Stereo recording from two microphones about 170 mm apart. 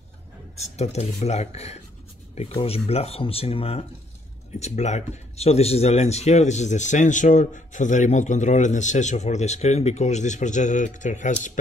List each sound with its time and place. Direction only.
0.6 s speech: 40° left (ahead or behind)